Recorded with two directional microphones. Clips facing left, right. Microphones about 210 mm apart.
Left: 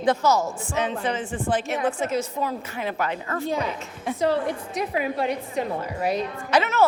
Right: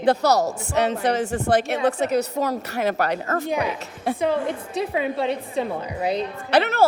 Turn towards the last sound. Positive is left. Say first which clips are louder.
# right 3 dB
turn(degrees=-60)  # may be behind; listen again after turning